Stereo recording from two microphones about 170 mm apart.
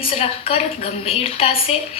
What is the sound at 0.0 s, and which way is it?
A woman's voice, 35° left (ahead or behind).